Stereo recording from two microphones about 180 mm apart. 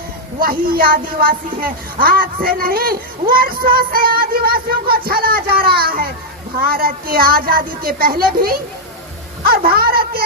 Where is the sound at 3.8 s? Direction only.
55° right (ahead or behind).